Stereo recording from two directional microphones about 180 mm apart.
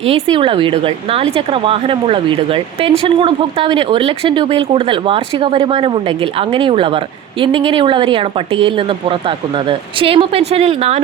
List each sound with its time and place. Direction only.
0.1 s speech: 30° right (ahead or behind)
9.6 s speech: 30° right (ahead or behind)